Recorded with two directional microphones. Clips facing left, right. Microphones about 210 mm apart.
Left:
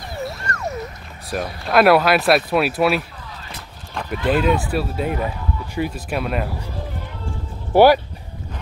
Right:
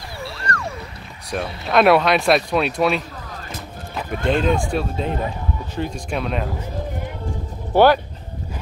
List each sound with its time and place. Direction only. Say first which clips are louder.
0.2 s a sound: even; 20° left (ahead or behind)
1.3 s speech: left 1 dB; 5° left (ahead or behind)
4.3 s speech: left 1 dB; 5° left (ahead or behind)
7.7 s speech: left 2 dB; 10° left (ahead or behind)